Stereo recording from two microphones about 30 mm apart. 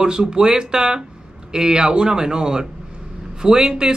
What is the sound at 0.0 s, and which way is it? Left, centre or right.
Speech, right.